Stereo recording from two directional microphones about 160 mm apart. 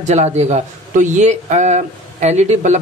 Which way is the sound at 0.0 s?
45° right (ahead or behind).